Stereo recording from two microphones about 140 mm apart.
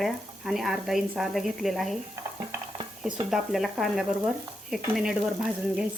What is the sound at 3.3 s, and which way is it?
Speech, centre (ahead or behind).